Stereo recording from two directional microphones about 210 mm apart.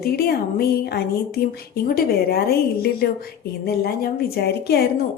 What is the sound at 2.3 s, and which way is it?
A woman's voice, 45° left (ahead or behind).